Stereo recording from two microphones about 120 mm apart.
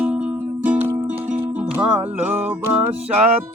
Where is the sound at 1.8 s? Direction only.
15° right (ahead or behind).